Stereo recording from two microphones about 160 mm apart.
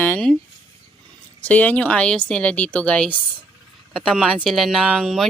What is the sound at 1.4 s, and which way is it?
A woman's voice, 10° left (ahead or behind).